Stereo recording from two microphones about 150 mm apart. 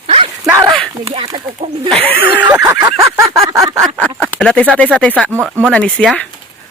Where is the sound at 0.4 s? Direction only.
15° right (ahead or behind).